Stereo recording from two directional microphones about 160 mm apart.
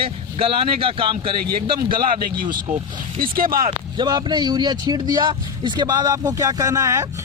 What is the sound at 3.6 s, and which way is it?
Speech, 30° right (ahead or behind).